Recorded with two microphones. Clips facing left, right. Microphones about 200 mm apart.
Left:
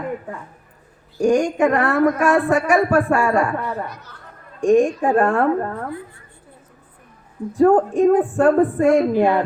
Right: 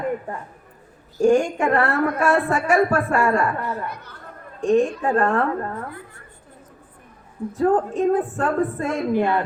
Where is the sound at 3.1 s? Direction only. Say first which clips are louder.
Left 2 dB; 75° left (ahead or behind).